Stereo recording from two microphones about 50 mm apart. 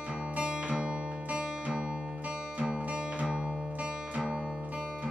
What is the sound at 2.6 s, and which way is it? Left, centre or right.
Music, right.